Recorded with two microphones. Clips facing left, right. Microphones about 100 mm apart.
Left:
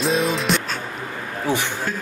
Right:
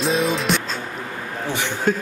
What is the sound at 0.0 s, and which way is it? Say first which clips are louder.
Music: even; centre (ahead or behind).